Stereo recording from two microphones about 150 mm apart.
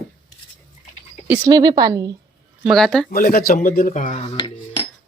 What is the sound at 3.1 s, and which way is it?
Speech, 75° left (ahead or behind).